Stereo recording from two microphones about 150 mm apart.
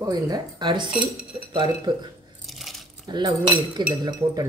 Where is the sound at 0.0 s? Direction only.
25° right (ahead or behind).